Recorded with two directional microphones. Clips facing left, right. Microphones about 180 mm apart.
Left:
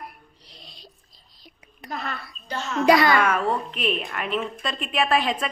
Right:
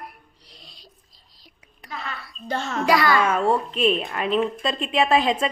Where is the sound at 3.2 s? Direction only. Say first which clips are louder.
Right 2 dB; 25° right (ahead or behind).